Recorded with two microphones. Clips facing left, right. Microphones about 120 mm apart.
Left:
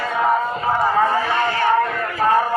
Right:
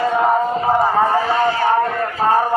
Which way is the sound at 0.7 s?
30° right (ahead or behind).